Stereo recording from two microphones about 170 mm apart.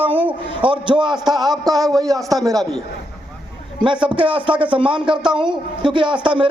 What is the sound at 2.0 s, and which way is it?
Speech, 20° right (ahead or behind).